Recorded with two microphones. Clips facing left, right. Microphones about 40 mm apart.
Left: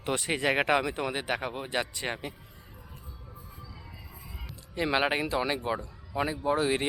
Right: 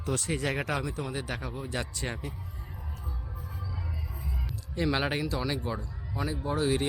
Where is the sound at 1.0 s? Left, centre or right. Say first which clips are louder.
Left 4 dB; left.